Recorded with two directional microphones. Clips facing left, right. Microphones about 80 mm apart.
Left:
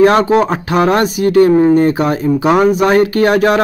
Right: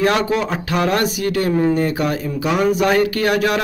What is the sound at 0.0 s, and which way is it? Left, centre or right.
Speech, left.